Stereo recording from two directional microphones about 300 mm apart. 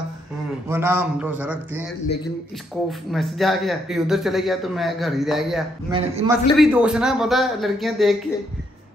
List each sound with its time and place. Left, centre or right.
0.7 s a man's voice: centre
3.1 s a man's voice: centre
5.9 s a man's voice: centre
6.6 s a man's voice: centre